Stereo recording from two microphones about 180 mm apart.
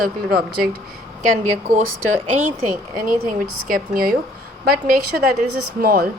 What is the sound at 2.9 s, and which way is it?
A woman's voice, 50° right (ahead or behind).